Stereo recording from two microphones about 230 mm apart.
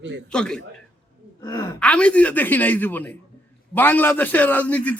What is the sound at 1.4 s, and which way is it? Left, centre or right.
A woman's voice, centre.